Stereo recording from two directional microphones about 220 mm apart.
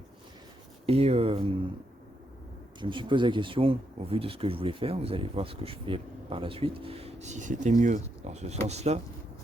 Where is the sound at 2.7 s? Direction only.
20° right (ahead or behind).